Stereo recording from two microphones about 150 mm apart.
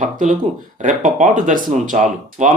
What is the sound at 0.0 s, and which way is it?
Speech, 60° right (ahead or behind).